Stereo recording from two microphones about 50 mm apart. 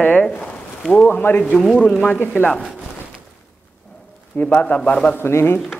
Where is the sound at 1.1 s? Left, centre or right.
Left.